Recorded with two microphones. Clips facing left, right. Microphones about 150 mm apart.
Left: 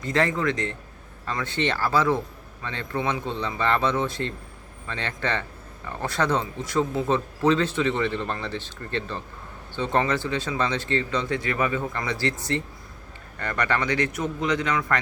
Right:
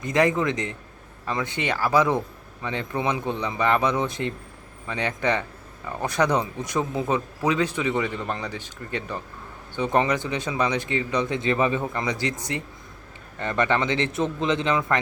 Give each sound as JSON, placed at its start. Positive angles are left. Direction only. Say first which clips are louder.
{"t": 0.0, "sound": "a man's voice", "louder": "right 2 dB", "side_deg": -15}